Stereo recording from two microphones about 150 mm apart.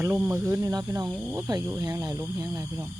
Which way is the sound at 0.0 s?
15° right (ahead or behind).